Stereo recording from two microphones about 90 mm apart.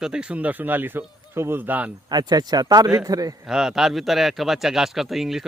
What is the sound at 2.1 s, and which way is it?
Speech, 50° right (ahead or behind).